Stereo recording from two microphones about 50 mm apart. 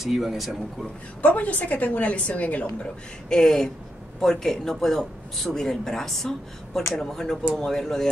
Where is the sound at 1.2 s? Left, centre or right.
Left.